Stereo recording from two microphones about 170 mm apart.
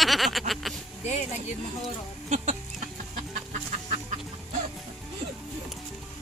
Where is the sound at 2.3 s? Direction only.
45° right (ahead or behind).